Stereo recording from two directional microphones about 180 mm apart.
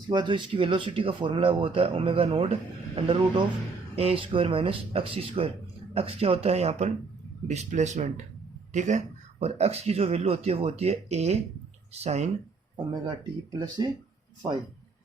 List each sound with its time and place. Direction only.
0.1 s speech: 25° right (ahead or behind)
12.7 s speech: 25° right (ahead or behind)